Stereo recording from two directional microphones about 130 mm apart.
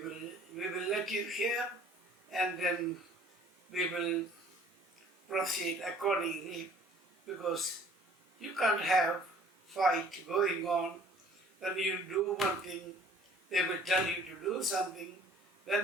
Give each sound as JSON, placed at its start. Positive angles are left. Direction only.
{"t": 0.5, "sound": "a sound", "side_deg": 0}
{"t": 2.3, "sound": "a woman's voice", "side_deg": 0}
{"t": 5.3, "sound": "a woman's voice", "side_deg": 0}